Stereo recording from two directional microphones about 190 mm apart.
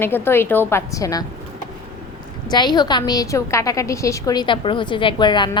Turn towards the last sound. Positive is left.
turn(degrees=25)  # may be behind; listen again after turning